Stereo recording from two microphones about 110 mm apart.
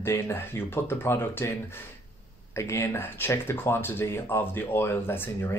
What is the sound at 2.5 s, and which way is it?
Speech, 25° left (ahead or behind).